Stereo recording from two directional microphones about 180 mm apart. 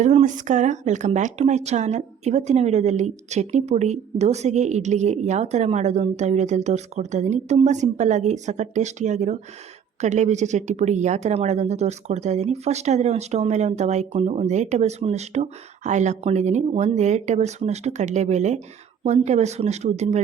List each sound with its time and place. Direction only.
0.0 s speech: 40° right (ahead or behind)